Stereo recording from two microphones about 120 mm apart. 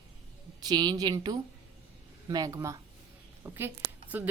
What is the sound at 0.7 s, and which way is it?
Speech, 35° right (ahead or behind).